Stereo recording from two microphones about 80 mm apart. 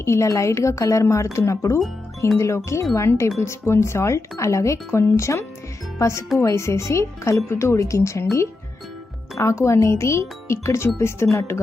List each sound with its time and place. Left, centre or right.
0.0 s speech: left